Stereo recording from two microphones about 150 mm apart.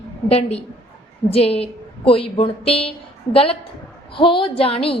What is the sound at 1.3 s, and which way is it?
A woman's voice, 40° left (ahead or behind).